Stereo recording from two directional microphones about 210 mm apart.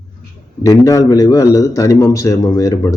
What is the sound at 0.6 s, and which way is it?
Speech, 15° left (ahead or behind).